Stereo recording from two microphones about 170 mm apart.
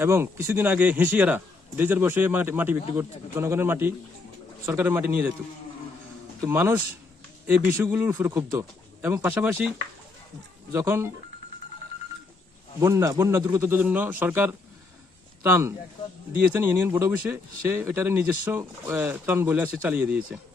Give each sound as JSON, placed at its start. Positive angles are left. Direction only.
{"t": 0.0, "sound": "a man's voice", "side_deg": -15}
{"t": 6.4, "sound": "a man's voice", "side_deg": -15}
{"t": 7.9, "sound": "a man's voice", "side_deg": -10}
{"t": 12.8, "sound": "a man's voice", "side_deg": -15}